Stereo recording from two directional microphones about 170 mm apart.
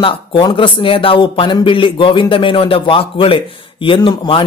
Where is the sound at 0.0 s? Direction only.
25° left (ahead or behind).